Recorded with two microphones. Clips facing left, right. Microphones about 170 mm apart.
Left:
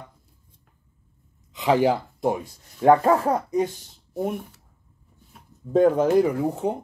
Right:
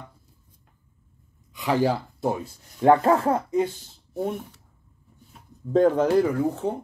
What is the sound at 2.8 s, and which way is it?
Speech, 20° left (ahead or behind).